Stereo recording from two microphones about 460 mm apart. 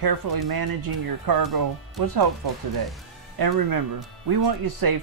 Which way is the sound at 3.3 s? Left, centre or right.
Right.